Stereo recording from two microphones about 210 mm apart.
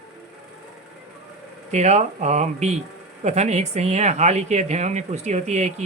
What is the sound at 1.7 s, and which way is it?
Speech, 30° right (ahead or behind).